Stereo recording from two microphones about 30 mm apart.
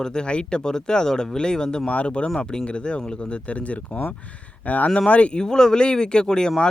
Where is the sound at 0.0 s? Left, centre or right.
Left.